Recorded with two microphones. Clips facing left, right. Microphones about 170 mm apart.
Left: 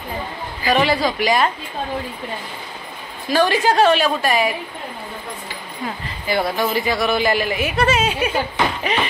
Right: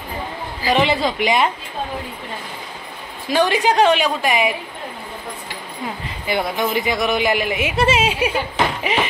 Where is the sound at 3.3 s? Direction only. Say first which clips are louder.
Even; 20° right (ahead or behind).